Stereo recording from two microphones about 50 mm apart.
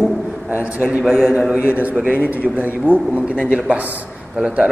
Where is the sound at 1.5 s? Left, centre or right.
Right.